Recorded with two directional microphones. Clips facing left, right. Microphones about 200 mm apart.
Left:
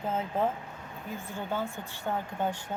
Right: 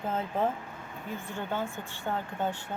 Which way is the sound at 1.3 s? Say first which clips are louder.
Even; 10° left (ahead or behind).